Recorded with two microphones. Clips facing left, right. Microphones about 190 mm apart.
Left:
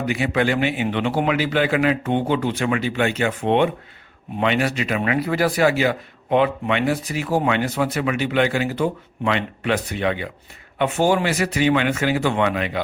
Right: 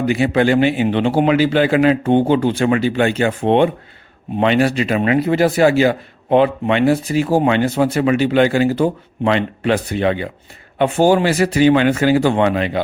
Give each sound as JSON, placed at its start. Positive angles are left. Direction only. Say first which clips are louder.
{"t": 0.0, "sound": "speech", "louder": "right 6 dB", "side_deg": -30}